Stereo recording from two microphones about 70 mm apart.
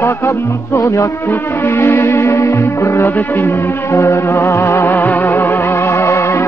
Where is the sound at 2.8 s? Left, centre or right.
Left.